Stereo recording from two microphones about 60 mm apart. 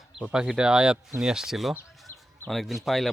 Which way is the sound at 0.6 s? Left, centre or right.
Centre.